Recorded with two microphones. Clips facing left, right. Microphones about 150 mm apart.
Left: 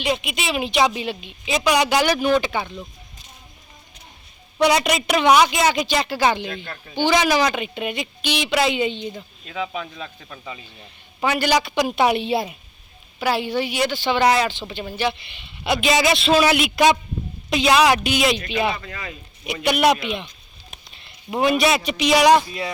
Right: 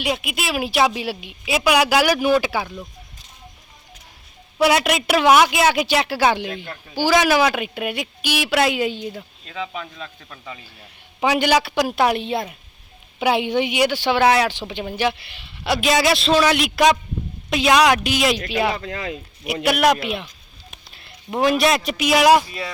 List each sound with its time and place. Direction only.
0.0 s a woman's voice: 5° right (ahead or behind)
4.5 s a woman's voice: 5° right (ahead or behind)
9.5 s speech: 5° left (ahead or behind)
10.8 s a woman's voice: 10° right (ahead or behind); by 12.5 s 5° left (ahead or behind)
13.1 s speech: 15° right (ahead or behind)
14.5 s speech: 15° right (ahead or behind)
15.4 s a woman's voice: centre (ahead or behind)
18.8 s speech: 65° right (ahead or behind)
19.6 s a woman's voice: centre (ahead or behind)